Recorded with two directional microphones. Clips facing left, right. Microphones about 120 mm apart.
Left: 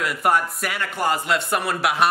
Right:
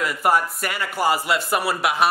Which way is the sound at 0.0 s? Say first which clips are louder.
Right 1 dB; centre (ahead or behind).